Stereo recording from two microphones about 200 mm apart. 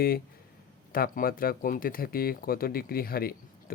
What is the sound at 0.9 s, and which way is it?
Speech, 45° left (ahead or behind).